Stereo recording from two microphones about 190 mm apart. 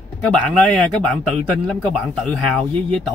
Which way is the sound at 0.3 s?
5° left (ahead or behind).